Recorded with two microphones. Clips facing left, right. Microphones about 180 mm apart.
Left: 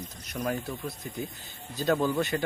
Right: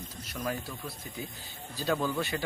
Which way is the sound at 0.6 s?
20° left (ahead or behind).